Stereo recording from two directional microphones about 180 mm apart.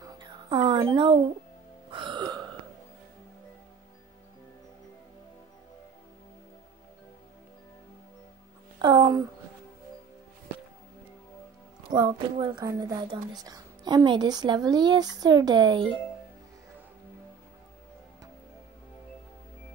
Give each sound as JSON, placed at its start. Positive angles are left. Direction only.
{"t": 0.0, "sound": "music", "side_deg": -25}
{"t": 0.9, "sound": "a woman's voice", "side_deg": -25}
{"t": 1.9, "sound": "music", "side_deg": -25}
{"t": 8.8, "sound": "a sound", "side_deg": -25}
{"t": 11.9, "sound": "a woman's voice", "side_deg": -25}